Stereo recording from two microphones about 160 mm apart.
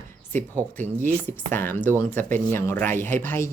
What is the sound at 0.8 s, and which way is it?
Speech, 10° left (ahead or behind).